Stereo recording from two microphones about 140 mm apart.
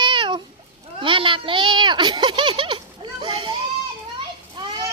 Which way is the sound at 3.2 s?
30° right (ahead or behind).